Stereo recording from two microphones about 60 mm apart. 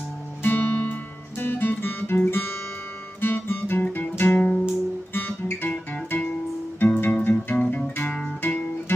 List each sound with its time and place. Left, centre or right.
0.4 s music: left
5.1 s guitar: left
6.8 s music: left
8.4 s guitar: left